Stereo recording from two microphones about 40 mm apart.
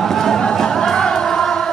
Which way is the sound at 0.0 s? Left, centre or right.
Centre.